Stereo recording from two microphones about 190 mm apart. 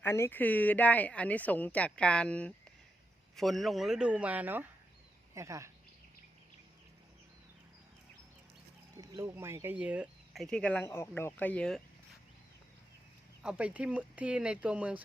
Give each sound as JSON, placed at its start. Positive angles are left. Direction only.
{"t": 0.0, "sound": "speech", "side_deg": 15}
{"t": 9.0, "sound": "speech", "side_deg": -20}
{"t": 13.4, "sound": "speech", "side_deg": -5}